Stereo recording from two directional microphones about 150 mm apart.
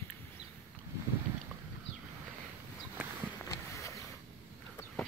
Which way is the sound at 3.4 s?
20° left (ahead or behind).